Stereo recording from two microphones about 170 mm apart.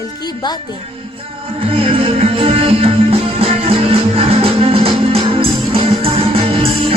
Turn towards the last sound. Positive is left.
turn(degrees=-35)  # may be behind; listen again after turning